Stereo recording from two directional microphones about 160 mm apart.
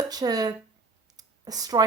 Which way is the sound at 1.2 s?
25° right (ahead or behind).